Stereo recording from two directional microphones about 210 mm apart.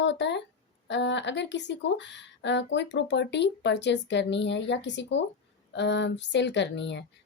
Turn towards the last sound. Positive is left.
turn(degrees=55)  # may be behind; listen again after turning